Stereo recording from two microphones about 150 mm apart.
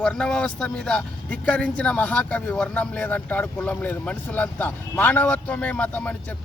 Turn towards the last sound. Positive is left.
turn(degrees=10)  # may be behind; listen again after turning